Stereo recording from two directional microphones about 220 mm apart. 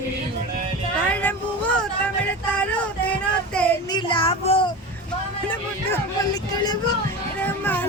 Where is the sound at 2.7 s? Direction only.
5° left (ahead or behind).